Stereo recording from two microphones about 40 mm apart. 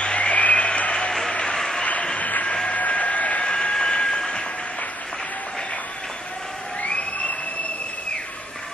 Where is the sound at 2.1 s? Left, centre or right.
Left.